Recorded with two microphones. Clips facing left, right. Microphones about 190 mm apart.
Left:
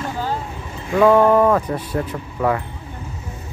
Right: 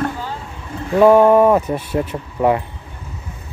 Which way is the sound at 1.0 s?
15° right (ahead or behind).